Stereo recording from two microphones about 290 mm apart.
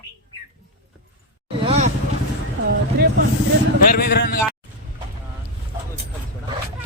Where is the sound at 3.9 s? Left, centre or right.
Left.